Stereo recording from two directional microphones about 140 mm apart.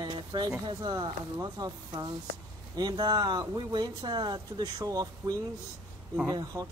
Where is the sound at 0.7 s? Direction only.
35° right (ahead or behind).